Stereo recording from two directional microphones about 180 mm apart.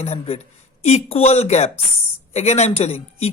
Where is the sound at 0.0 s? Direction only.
35° left (ahead or behind).